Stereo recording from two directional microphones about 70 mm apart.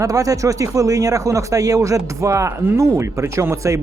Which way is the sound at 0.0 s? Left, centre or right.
Right.